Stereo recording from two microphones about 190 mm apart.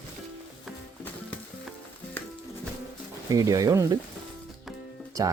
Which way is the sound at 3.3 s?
20° right (ahead or behind).